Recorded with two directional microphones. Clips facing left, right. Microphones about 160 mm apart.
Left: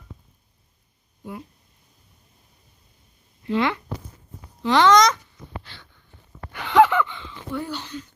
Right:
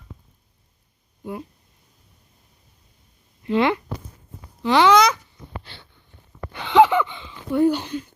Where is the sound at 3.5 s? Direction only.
20° right (ahead or behind).